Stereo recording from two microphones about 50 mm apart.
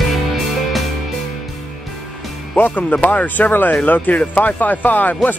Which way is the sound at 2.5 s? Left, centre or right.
Left.